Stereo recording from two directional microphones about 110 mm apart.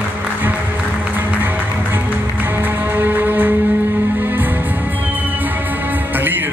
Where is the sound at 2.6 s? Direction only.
15° right (ahead or behind).